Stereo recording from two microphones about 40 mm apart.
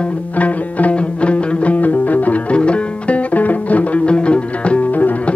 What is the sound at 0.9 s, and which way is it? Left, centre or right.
Music, left.